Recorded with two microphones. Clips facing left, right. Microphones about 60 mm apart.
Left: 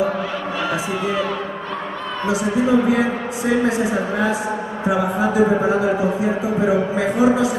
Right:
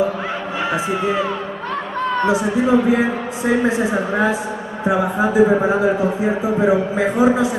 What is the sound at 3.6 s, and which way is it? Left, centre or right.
A man's voice, right.